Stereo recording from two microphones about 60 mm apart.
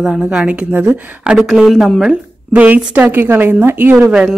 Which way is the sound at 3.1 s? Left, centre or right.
Right.